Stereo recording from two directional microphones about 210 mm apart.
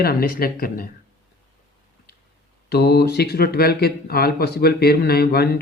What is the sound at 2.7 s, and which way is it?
Speech, 50° left (ahead or behind).